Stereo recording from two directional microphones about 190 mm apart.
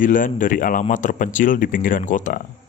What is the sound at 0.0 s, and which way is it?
A man's voice, 45° left (ahead or behind).